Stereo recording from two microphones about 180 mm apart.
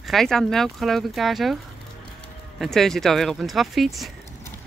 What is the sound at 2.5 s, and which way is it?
Speech, centre (ahead or behind).